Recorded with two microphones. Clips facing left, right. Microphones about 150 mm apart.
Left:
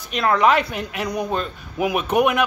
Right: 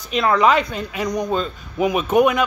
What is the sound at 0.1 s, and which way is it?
A woman's voice, centre (ahead or behind).